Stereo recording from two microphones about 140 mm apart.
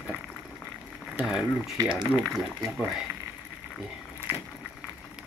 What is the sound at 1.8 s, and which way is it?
Speech, 30° right (ahead or behind).